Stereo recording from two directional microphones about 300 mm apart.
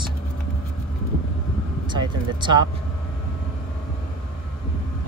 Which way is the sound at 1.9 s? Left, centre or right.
Centre.